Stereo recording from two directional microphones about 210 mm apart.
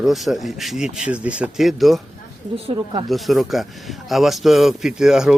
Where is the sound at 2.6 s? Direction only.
20° right (ahead or behind).